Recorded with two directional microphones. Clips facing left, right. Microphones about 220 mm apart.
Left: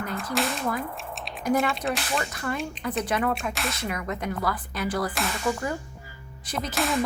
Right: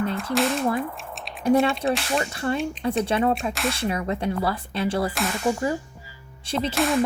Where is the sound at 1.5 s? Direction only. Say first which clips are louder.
Right 5 dB; 30° right (ahead or behind).